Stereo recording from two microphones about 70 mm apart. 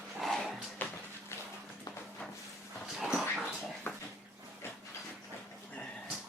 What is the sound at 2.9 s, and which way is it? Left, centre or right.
Dog, centre.